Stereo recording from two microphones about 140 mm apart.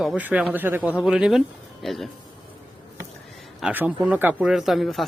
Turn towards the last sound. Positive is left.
turn(degrees=0)  # may be behind; listen again after turning